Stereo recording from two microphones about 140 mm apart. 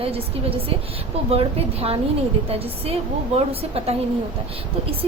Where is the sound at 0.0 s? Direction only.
45° right (ahead or behind).